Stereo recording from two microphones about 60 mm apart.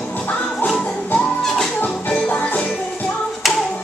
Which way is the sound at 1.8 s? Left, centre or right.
Left.